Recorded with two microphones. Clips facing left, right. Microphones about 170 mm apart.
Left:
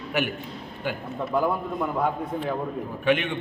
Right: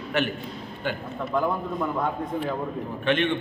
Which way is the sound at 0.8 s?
5° left (ahead or behind).